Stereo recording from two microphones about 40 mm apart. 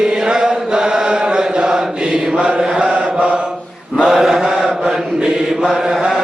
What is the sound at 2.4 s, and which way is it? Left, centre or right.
Mantra, right.